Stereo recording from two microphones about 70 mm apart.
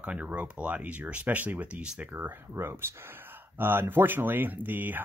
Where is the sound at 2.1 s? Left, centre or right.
Right.